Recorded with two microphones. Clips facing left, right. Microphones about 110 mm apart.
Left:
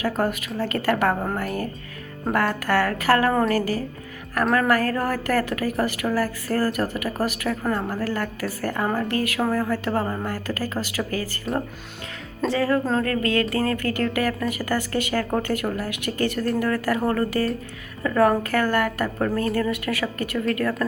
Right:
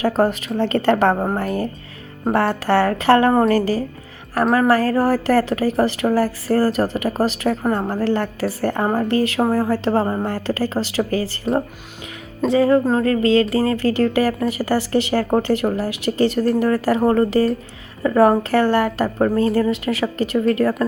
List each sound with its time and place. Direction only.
0.0 s a woman's voice: 30° right (ahead or behind)
6.1 s a woman's voice: 40° right (ahead or behind)
8.0 s a woman's voice: 30° right (ahead or behind)